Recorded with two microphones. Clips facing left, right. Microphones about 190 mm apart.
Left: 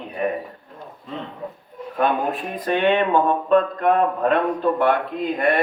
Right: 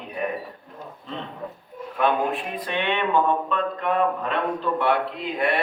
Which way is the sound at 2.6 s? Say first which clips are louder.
Left 7 dB; 45° left (ahead or behind).